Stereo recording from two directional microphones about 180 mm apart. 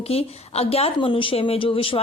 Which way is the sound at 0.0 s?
35° left (ahead or behind).